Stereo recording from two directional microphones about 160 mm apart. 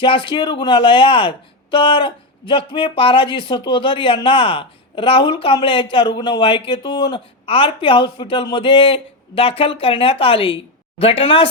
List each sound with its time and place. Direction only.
0.0 s speech: 30° left (ahead or behind)